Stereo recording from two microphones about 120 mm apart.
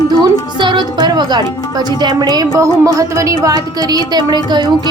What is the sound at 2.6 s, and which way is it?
A woman's voice, 25° right (ahead or behind).